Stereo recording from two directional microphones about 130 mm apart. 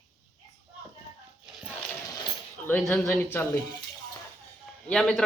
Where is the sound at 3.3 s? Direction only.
20° left (ahead or behind).